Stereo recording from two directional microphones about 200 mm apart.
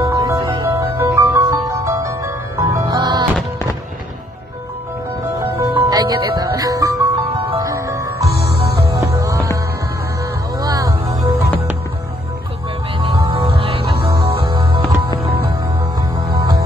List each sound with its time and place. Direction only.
0.1 s music: 15° right (ahead or behind)
5.6 s music: 20° right (ahead or behind)
8.4 s music: 55° left (ahead or behind)
9.1 s music: 15° right (ahead or behind)
10.6 s music: 15° right (ahead or behind)
13.0 s music: 25° right (ahead or behind)